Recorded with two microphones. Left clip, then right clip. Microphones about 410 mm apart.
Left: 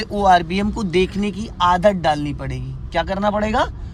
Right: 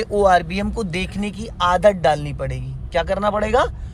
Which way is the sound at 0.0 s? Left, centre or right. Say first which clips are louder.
Left 1 dB; centre.